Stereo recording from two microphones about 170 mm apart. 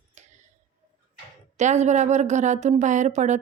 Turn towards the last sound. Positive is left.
turn(degrees=-45)  # may be behind; listen again after turning